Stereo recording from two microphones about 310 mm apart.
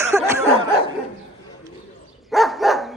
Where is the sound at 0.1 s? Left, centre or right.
Centre.